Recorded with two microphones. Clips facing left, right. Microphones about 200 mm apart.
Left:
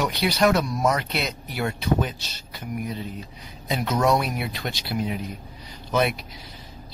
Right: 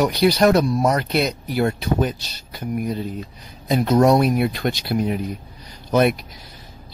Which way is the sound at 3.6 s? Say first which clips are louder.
Right 7 dB; 40° right (ahead or behind).